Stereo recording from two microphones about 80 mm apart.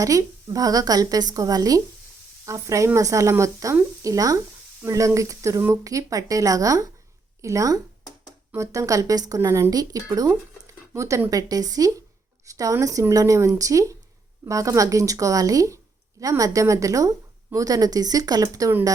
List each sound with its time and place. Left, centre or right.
0.0 s speech: right